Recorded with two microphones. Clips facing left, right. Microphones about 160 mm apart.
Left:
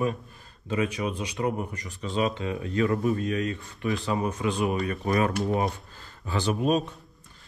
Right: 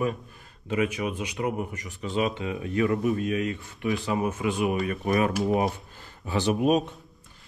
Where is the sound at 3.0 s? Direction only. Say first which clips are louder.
Right 1 dB; 20° right (ahead or behind).